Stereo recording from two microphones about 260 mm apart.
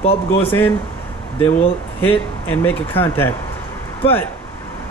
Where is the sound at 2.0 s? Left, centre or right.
Centre.